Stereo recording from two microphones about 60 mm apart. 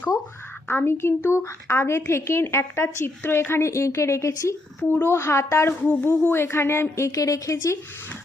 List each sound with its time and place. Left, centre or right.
0.7 s a woman's voice: left
4.9 s a woman's voice: left
5.9 s a woman's voice: left